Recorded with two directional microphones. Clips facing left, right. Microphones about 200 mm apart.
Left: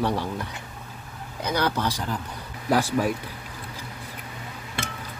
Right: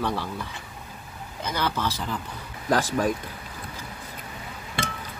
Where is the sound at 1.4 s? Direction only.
15° left (ahead or behind).